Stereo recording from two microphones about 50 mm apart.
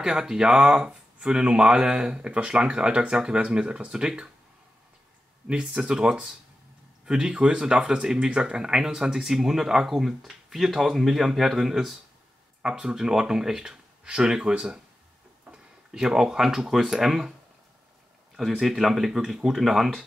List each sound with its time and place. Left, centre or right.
0.0 s speech: centre
5.5 s speech: centre
18.6 s speech: centre